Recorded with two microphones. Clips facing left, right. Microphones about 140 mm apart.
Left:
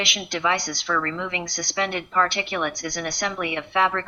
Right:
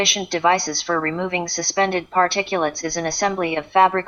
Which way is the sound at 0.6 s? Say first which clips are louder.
Right 4 dB; 30° right (ahead or behind).